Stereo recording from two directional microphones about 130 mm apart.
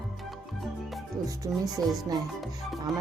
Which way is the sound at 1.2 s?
25° right (ahead or behind).